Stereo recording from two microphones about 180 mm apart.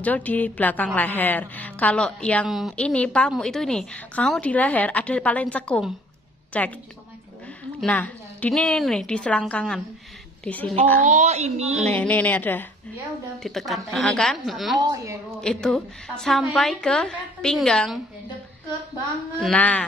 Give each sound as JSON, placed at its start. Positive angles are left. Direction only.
{"t": 0.0, "sound": "a woman's voice", "side_deg": 10}
{"t": 7.8, "sound": "a woman's voice", "side_deg": 10}
{"t": 11.0, "sound": "a woman's voice", "side_deg": -40}
{"t": 11.9, "sound": "a woman's voice", "side_deg": 10}
{"t": 14.8, "sound": "a woman's voice", "side_deg": -20}
{"t": 15.4, "sound": "a woman's voice", "side_deg": 5}
{"t": 19.4, "sound": "a woman's voice", "side_deg": 5}